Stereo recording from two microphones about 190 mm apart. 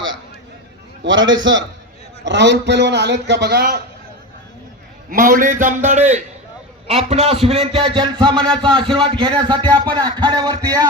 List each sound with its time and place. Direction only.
1.0 s a man's voice: 80° right
2.2 s a man's voice: 65° right (ahead or behind)
5.1 s a man's voice: 50° right (ahead or behind); by 10.8 s 20° right (ahead or behind)